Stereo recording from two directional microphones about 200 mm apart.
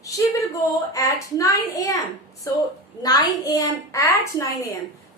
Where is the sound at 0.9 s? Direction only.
15° left (ahead or behind).